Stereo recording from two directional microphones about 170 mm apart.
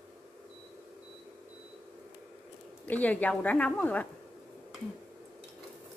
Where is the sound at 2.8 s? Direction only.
10° left (ahead or behind).